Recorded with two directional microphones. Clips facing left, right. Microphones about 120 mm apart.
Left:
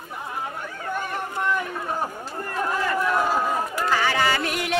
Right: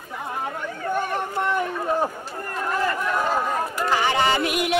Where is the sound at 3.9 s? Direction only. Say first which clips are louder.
Right 2 dB; 20° right (ahead or behind).